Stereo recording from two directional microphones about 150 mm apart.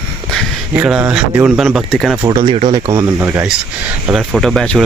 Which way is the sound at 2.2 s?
35° right (ahead or behind).